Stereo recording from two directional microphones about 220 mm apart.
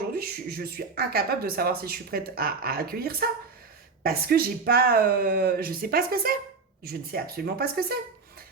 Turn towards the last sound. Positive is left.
turn(degrees=-45)  # may be behind; listen again after turning